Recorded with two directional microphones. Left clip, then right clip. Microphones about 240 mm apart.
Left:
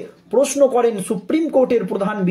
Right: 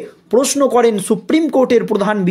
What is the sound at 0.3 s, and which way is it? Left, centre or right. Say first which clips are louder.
Speech: right 2 dB; right.